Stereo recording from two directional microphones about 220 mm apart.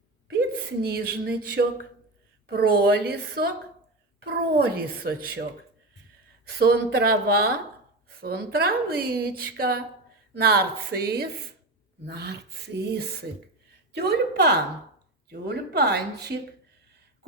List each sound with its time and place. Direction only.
0.3 s a sound: 45° right (ahead or behind)
2.5 s a woman's voice: 45° right (ahead or behind)
6.4 s a woman's voice: 45° right (ahead or behind)